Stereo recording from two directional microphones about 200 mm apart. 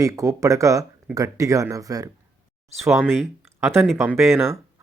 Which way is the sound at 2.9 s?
5° right (ahead or behind).